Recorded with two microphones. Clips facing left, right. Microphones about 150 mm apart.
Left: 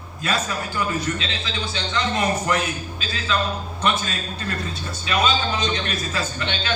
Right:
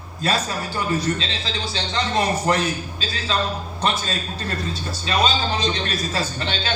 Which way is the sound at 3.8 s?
35° right (ahead or behind).